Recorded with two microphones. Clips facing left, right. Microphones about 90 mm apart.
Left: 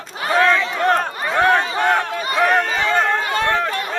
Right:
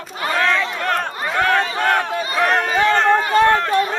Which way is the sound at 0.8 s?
20° left (ahead or behind).